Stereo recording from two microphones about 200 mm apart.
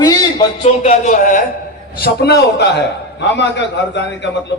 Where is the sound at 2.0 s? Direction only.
55° left (ahead or behind).